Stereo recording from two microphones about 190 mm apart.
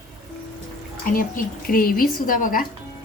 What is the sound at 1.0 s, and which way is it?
Speech, 45° left (ahead or behind).